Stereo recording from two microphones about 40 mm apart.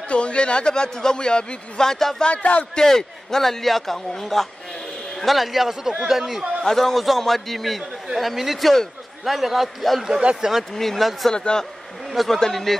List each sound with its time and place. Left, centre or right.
0.1 s a man's voice: left; by 2.2 s centre
2.2 s speech: left
2.7 s a man's voice: centre
6.6 s a man's voice: centre
11.2 s a man's voice: centre
12.1 s a man's voice: centre